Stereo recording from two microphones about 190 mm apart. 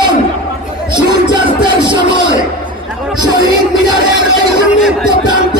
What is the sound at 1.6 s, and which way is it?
A man's voice, 25° right (ahead or behind).